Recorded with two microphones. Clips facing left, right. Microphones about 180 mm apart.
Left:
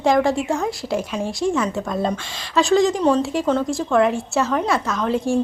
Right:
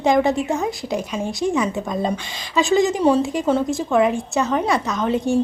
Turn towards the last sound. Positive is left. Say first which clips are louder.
# right 1 dB
turn(degrees=0)  # may be behind; listen again after turning